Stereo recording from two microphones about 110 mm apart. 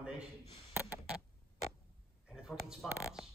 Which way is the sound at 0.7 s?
20° right (ahead or behind).